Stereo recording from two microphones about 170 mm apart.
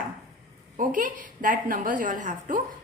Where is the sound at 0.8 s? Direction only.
50° right (ahead or behind).